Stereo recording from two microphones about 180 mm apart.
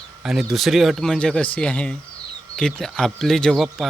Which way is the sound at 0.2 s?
Centre (ahead or behind).